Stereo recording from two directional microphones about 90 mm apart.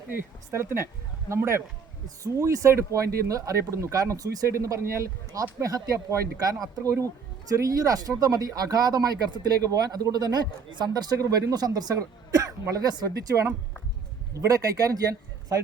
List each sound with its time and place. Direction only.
0.1 s speech: 30° right (ahead or behind)